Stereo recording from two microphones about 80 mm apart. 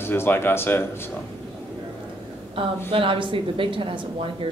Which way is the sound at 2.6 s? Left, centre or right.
Right.